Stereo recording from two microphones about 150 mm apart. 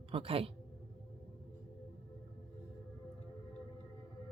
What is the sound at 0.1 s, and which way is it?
Speech, 40° right (ahead or behind).